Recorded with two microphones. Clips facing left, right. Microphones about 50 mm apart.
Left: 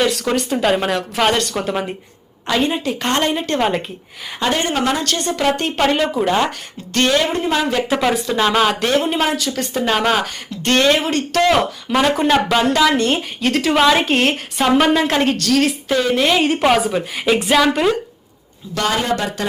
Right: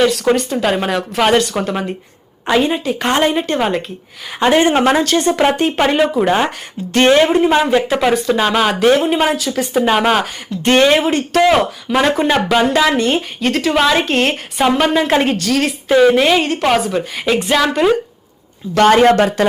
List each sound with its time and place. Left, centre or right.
0.0 s speech: centre
4.4 s a woman's voice: right
5.5 s a woman's voice: centre
7.3 s a woman's voice: centre
7.9 s speech: centre
16.5 s speech: centre
18.7 s speech: right